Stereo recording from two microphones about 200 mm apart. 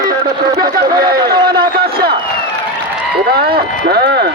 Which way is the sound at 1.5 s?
50° right (ahead or behind).